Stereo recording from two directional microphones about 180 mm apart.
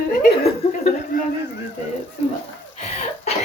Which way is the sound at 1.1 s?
50° left (ahead or behind).